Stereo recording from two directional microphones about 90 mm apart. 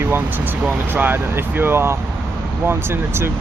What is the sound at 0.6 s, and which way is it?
Speech, 20° right (ahead or behind).